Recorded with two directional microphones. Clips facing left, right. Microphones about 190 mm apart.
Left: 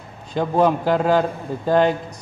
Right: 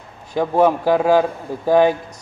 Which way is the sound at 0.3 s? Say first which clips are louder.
Right 2 dB; 5° right (ahead or behind).